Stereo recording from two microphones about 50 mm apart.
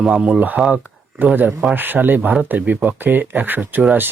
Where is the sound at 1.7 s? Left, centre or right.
Right.